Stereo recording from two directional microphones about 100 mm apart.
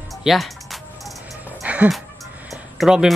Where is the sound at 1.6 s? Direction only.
15° right (ahead or behind).